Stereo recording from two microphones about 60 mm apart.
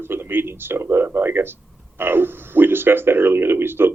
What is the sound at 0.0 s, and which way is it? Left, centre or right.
Speech, right.